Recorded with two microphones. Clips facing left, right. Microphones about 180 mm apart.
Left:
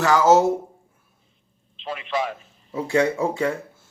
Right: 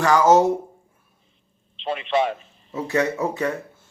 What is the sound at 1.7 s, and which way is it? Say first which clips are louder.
Speech: right 5 dB; 25° right (ahead or behind).